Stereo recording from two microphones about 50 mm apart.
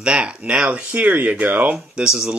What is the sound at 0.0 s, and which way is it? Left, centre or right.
Speech, right.